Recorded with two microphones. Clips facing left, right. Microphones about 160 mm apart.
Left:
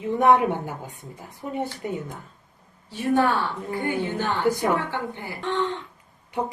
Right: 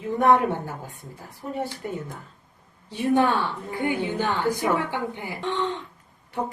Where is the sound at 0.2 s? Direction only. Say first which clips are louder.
Left 1 dB; 20° left (ahead or behind).